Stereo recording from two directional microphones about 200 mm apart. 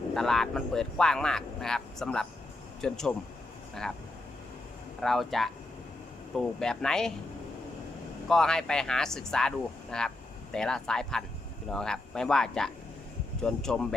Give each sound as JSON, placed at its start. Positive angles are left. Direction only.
{"t": 0.1, "sound": "speech", "side_deg": 0}
{"t": 5.0, "sound": "speech", "side_deg": 0}
{"t": 8.3, "sound": "speech", "side_deg": 5}